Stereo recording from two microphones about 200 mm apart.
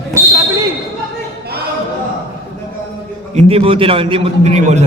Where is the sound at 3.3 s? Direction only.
30° right (ahead or behind).